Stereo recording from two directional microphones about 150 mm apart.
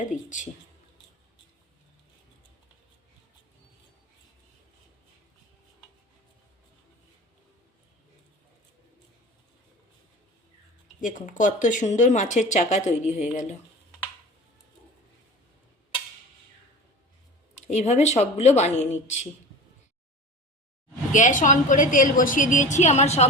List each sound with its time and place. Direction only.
0.0 s a woman's voice: 55° left (ahead or behind)
11.0 s speech: 60° left (ahead or behind)
17.7 s speech: 50° left (ahead or behind)
21.1 s a woman's voice: 55° left (ahead or behind)